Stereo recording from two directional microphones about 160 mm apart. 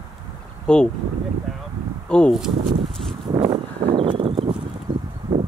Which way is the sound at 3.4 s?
30° right (ahead or behind).